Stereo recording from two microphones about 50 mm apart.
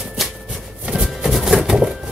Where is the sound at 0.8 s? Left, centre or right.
Centre.